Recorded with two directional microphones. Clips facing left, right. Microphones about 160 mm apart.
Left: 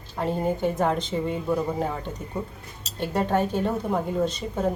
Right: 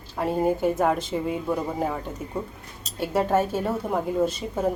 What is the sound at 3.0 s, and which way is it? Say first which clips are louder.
Speech: right 1 dB; 5° right (ahead or behind).